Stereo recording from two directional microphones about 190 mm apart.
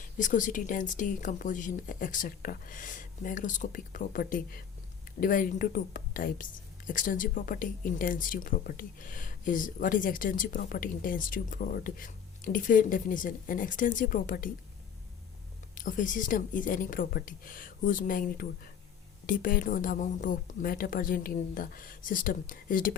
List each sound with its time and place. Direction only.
0.0 s speech: 40° left (ahead or behind)
15.7 s speech: 45° left (ahead or behind)